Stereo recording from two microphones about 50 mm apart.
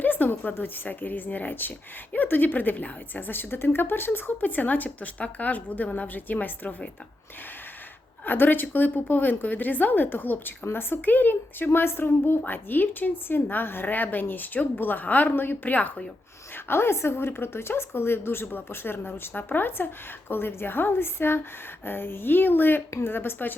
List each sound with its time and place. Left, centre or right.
0.0 s a woman's voice: left
4.4 s a woman's voice: left
8.2 s a woman's voice: left
16.6 s a woman's voice: left
22.9 s a woman's voice: left
23.1 s a woman's voice: left